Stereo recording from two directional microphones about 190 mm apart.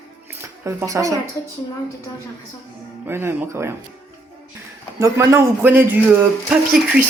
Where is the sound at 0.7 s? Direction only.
15° right (ahead or behind).